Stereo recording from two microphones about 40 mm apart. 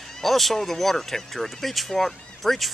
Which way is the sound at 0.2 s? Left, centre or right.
Centre.